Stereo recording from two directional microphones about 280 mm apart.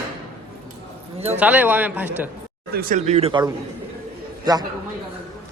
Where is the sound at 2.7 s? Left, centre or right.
Right.